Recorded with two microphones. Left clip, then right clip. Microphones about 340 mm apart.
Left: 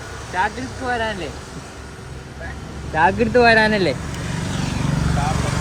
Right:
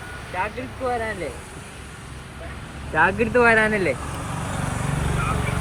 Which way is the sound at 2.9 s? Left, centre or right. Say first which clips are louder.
Left 2 dB; left.